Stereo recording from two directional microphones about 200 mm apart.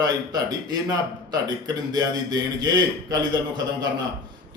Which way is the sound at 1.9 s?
20° right (ahead or behind).